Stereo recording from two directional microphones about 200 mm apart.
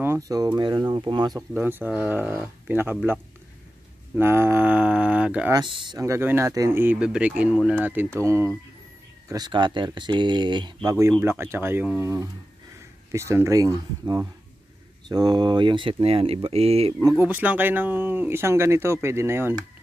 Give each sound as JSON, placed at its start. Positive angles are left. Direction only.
{"t": 0.0, "sound": "speech", "side_deg": -15}
{"t": 1.5, "sound": "speech", "side_deg": -10}
{"t": 5.5, "sound": "speech", "side_deg": -25}
{"t": 17.2, "sound": "speech", "side_deg": -10}